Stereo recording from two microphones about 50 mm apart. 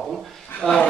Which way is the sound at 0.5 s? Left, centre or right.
Left.